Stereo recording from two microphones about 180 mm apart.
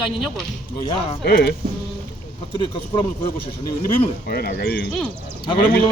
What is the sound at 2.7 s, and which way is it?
Speech, 30° left (ahead or behind).